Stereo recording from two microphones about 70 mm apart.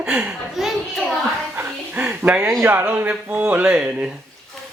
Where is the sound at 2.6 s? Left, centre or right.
Right.